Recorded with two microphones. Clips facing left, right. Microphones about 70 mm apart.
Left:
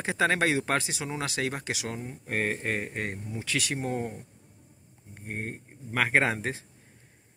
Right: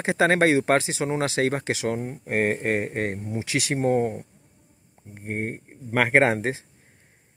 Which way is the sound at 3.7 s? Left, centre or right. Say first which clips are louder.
Right 9 dB; right.